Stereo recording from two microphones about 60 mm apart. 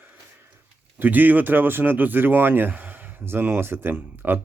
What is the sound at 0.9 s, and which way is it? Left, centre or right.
Speech, right.